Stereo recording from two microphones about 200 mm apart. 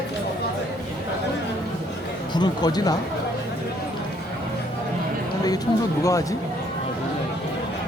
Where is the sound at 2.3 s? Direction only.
20° left (ahead or behind).